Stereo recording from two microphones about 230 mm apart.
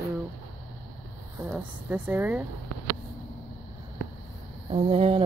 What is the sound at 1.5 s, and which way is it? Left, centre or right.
Speech, centre.